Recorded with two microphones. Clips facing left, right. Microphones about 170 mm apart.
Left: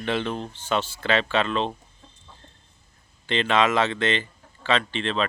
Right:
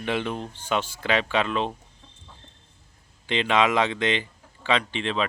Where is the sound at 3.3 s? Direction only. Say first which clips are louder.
Even; 15° right (ahead or behind).